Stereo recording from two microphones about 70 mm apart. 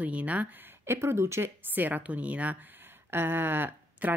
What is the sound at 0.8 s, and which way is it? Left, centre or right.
Speech, right.